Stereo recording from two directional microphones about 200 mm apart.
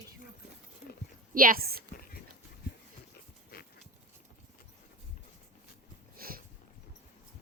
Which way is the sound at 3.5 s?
50° left (ahead or behind).